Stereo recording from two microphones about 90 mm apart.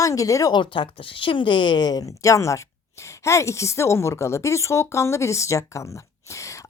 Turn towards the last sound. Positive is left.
turn(degrees=35)  # may be behind; listen again after turning